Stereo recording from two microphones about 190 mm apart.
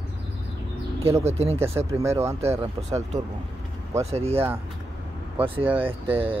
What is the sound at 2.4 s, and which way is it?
Speech, 35° right (ahead or behind).